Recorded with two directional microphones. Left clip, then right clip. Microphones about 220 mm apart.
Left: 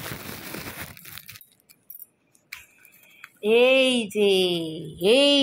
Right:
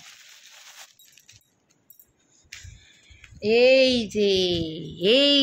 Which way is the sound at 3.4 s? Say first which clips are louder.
Right 1 dB; 10° right (ahead or behind).